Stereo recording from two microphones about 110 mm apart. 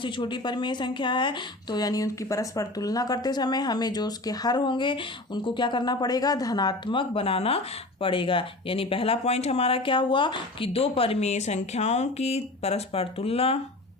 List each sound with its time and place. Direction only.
0.0 s a woman's voice: 45° left (ahead or behind); by 7.6 s 65° left (ahead or behind)
8.0 s speech: 50° left (ahead or behind)